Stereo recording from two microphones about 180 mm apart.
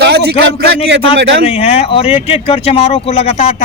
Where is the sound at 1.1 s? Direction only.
90° right.